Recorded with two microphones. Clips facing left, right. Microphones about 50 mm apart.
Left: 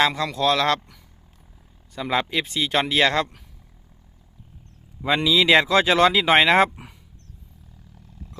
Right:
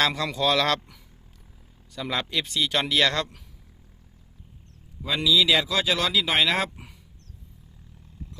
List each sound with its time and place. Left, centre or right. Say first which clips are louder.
0.1 s speech: left 2 dB; centre
2.0 s speech: left 5 dB; left
5.0 s speech: left 3 dB; left